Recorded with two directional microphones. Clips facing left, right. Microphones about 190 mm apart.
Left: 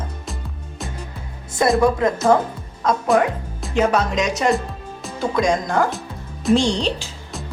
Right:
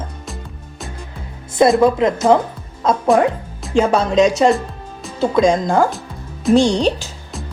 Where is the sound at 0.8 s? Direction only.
Centre (ahead or behind).